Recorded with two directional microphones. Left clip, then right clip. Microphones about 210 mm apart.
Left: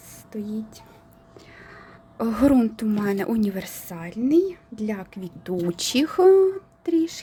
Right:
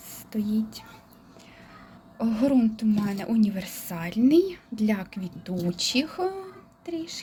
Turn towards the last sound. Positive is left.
turn(degrees=30)  # may be behind; listen again after turning